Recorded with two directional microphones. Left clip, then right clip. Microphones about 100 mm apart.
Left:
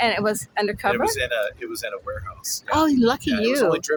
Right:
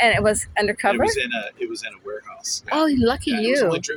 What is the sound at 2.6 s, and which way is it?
Speech, 30° left (ahead or behind).